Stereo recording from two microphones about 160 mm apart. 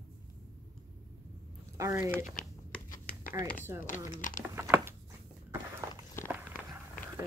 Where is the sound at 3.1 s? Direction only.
65° left (ahead or behind).